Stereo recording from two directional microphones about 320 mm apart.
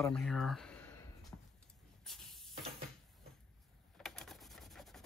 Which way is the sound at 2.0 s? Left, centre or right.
Centre.